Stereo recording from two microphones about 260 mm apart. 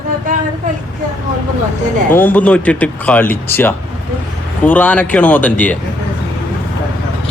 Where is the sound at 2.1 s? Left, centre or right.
Centre.